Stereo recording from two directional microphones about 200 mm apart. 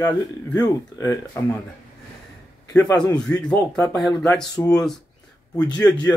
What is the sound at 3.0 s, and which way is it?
Speech, 20° left (ahead or behind).